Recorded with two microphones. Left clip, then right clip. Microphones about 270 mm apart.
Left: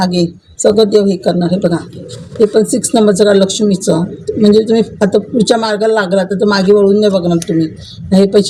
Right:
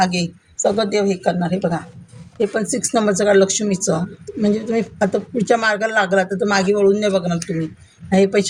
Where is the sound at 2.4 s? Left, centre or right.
Right.